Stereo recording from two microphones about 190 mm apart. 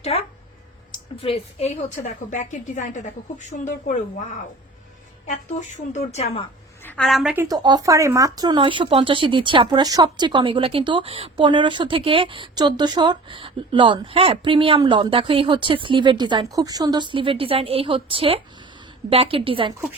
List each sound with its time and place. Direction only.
0.1 s a sound: 30° left (ahead or behind)
0.9 s a woman's voice: 30° left (ahead or behind)
5.3 s a woman's voice: 40° left (ahead or behind)
6.8 s a woman's voice: 5° left (ahead or behind)
7.4 s speech: 20° right (ahead or behind)